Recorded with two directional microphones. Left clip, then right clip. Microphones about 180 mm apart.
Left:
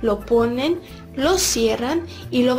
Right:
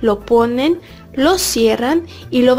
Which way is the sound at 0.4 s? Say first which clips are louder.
Right 5 dB; 45° right (ahead or behind).